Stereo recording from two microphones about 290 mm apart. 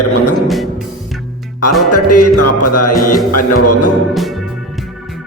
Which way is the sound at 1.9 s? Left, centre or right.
Left.